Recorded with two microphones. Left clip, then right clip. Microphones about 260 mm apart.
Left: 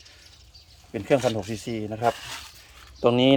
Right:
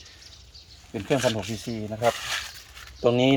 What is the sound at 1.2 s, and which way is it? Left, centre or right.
Speech, centre.